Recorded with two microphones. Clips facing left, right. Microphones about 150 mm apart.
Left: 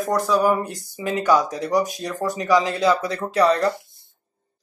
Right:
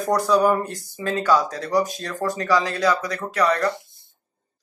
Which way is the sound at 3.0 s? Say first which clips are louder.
Left 3 dB; 30° left (ahead or behind).